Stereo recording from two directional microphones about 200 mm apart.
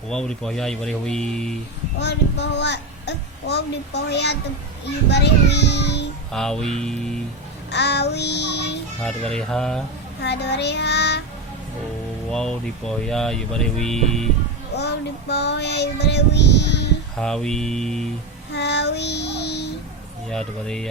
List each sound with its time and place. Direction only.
0.1 s speech: 5° left (ahead or behind)
2.0 s a child's voice: 60° left (ahead or behind)
6.3 s speech: 5° left (ahead or behind)
7.7 s child singing: 55° left (ahead or behind)
9.0 s speech: 5° left (ahead or behind)
10.2 s child singing: 60° left (ahead or behind)
12.3 s speech: 5° left (ahead or behind)
14.8 s child singing: 55° left (ahead or behind)
17.2 s speech: 5° left (ahead or behind)
18.5 s child singing: 60° left (ahead or behind)
20.3 s speech: 5° left (ahead or behind)